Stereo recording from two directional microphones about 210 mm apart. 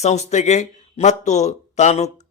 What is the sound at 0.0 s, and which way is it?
Speech, 30° left (ahead or behind).